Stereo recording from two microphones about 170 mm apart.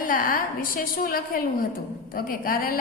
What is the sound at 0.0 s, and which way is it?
A woman's voice, 55° left (ahead or behind).